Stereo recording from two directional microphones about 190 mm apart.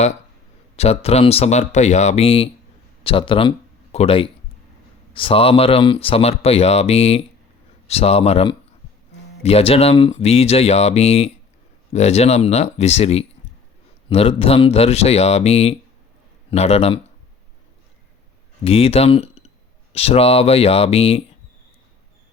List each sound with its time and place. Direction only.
0.8 s speech: 35° left (ahead or behind)
18.6 s speech: 30° left (ahead or behind)